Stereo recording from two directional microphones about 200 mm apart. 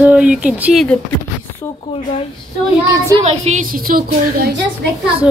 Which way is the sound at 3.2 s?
35° right (ahead or behind).